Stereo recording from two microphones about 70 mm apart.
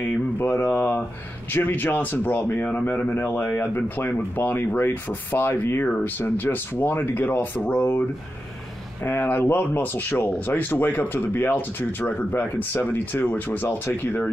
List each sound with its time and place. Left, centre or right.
0.4 s a sound: left
0.7 s speech: left
9.0 s speech: left